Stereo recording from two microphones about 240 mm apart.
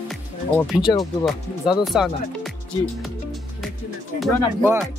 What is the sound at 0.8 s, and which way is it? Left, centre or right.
Speech, centre.